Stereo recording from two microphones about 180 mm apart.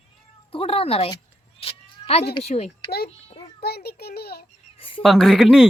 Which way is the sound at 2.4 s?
35° left (ahead or behind).